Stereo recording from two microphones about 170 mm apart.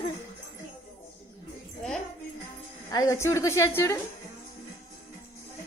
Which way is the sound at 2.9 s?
20° left (ahead or behind).